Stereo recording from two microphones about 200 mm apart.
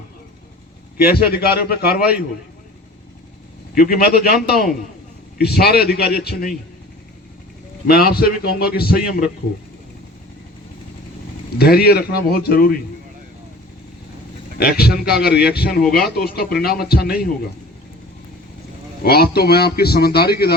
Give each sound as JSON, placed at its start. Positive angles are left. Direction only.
{"t": 0.9, "sound": "a man's voice", "side_deg": 50}
{"t": 3.8, "sound": "a man's voice", "side_deg": 50}
{"t": 5.4, "sound": "a man's voice", "side_deg": 55}
{"t": 7.9, "sound": "a man's voice", "side_deg": 50}
{"t": 11.5, "sound": "a man's voice", "side_deg": 50}
{"t": 14.6, "sound": "a man's voice", "side_deg": 50}
{"t": 19.0, "sound": "a man's voice", "side_deg": 50}